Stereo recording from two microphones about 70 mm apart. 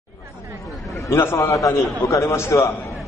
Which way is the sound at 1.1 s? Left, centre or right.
Left.